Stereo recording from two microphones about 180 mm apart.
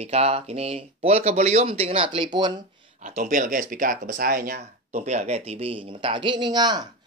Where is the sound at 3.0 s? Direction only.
40° right (ahead or behind).